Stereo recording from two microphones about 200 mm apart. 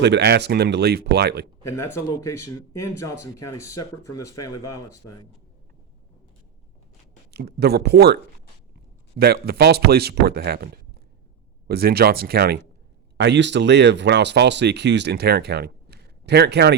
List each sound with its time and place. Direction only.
0.0 s speech: 55° right (ahead or behind)
1.6 s speech: 15° left (ahead or behind)
7.3 s speech: 50° right (ahead or behind)
11.7 s speech: 50° right (ahead or behind)